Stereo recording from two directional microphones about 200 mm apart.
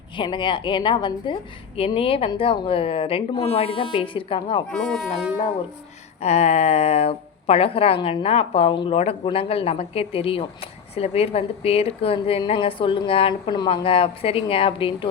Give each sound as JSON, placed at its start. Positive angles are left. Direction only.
{"t": 0.2, "sound": "a woman's voice", "side_deg": 25}
{"t": 4.7, "sound": "speech", "side_deg": 5}
{"t": 6.2, "sound": "a woman's voice", "side_deg": 35}